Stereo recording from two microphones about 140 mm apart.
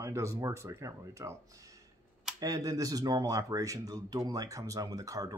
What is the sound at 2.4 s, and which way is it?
Speech, 25° right (ahead or behind).